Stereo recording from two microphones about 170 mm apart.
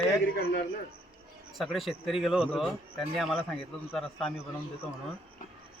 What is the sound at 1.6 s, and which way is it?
A man's voice, centre (ahead or behind).